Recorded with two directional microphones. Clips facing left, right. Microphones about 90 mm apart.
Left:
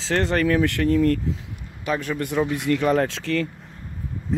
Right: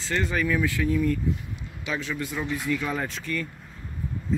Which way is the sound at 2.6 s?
70° left (ahead or behind).